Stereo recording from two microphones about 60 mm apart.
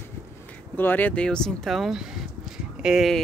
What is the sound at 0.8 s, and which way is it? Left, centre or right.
Speech, left.